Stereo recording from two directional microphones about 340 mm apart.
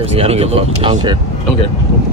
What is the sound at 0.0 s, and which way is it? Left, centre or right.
Speech, centre.